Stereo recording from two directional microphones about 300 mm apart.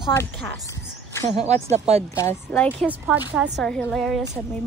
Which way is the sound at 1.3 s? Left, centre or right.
Right.